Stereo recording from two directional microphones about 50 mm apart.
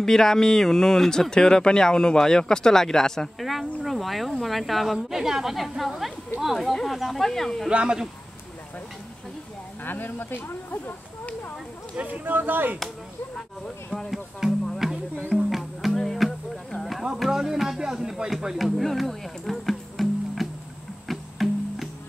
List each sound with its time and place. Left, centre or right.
0.0 s a woman's voice: centre
7.7 s a woman's voice: centre
9.8 s speech: left
11.9 s speech: right
13.8 s speech: centre
14.4 s a woman's voice: centre
14.8 s music: centre
15.9 s music: centre
17.0 s speech: centre
21.1 s music: centre